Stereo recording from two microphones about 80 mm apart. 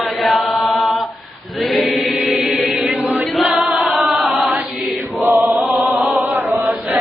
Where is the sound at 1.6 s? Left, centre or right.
Centre.